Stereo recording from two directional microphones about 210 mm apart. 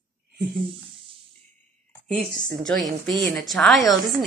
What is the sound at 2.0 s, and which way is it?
Speech, 40° right (ahead or behind).